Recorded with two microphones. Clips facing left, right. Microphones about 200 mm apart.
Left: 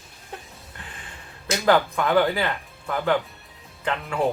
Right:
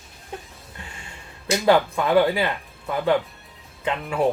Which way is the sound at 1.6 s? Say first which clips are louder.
Right 1 dB; 15° right (ahead or behind).